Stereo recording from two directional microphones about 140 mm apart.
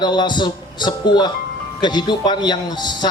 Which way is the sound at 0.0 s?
30° left (ahead or behind).